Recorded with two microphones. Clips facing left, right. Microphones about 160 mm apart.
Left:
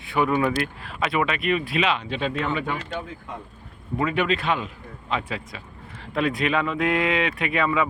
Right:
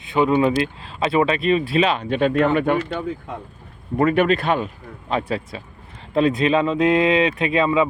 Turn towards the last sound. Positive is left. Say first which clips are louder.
# right 5 dB
turn(degrees=-25)  # may be behind; listen again after turning